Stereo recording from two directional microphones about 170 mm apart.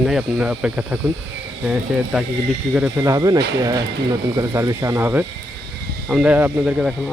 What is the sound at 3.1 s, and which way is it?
Speech, 20° right (ahead or behind).